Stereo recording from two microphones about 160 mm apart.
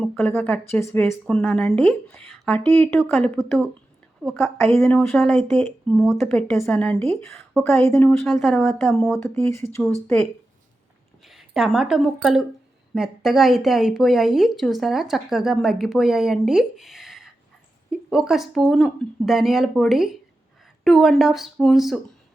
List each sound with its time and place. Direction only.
0.0 s speech: 10° left (ahead or behind)
1.3 s speech: 5° left (ahead or behind)
4.8 s speech: 10° left (ahead or behind)
7.9 s speech: 15° left (ahead or behind)
8.2 s speech: centre (ahead or behind)
9.1 s speech: 15° left (ahead or behind)
11.3 s a woman's voice: centre (ahead or behind)